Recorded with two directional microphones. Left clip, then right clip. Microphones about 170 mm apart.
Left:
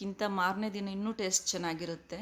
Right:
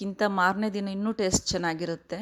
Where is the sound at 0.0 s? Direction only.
40° right (ahead or behind).